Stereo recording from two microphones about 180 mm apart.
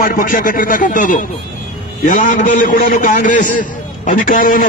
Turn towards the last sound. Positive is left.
turn(degrees=50)  # may be behind; listen again after turning